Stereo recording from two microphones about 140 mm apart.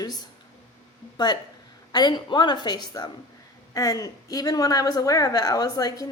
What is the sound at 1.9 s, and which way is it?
A woman's voice, 30° left (ahead or behind).